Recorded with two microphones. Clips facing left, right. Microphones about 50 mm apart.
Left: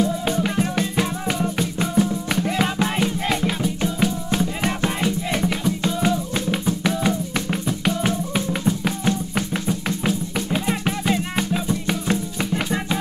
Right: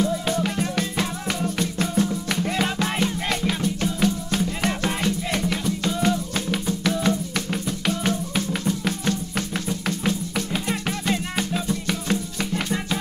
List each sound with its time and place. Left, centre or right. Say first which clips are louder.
0.4 s music: left 3 dB; centre
2.0 s music: left 4 dB; centre